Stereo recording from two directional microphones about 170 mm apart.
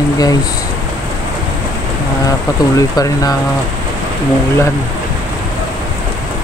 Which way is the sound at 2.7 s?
20° left (ahead or behind).